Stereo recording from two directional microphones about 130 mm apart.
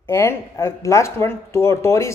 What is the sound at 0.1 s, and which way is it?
Speech, 20° left (ahead or behind).